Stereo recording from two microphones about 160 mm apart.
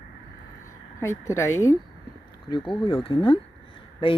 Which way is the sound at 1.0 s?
15° left (ahead or behind).